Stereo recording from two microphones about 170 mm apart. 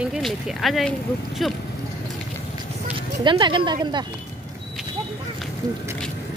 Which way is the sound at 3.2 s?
30° right (ahead or behind).